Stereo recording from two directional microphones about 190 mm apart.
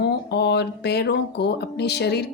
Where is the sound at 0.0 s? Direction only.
60° left (ahead or behind).